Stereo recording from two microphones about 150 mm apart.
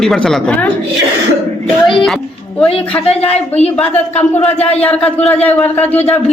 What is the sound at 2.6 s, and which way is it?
Speech, 45° left (ahead or behind).